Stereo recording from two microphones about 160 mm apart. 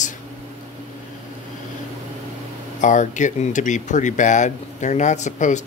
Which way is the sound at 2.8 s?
50° left (ahead or behind).